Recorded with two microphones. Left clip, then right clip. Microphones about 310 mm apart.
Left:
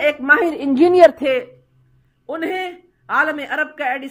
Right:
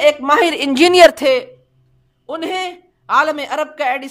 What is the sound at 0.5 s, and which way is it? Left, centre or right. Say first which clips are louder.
Speech: right 2 dB; right.